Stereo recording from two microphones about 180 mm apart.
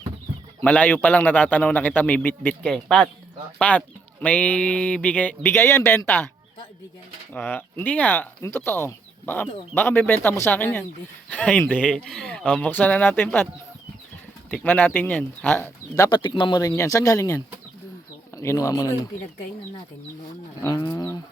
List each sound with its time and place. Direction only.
0.6 s speech: 10° left (ahead or behind)
7.3 s speech: 10° left (ahead or behind)
14.5 s speech: 10° left (ahead or behind)
16.0 s speech: 25° left (ahead or behind)
20.6 s speech: 15° left (ahead or behind)